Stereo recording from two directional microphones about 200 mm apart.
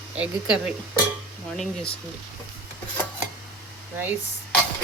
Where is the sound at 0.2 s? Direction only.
5° right (ahead or behind).